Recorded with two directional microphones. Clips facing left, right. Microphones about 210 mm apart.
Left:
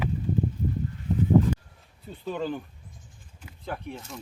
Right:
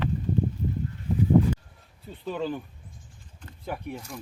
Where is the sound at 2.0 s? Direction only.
Centre (ahead or behind).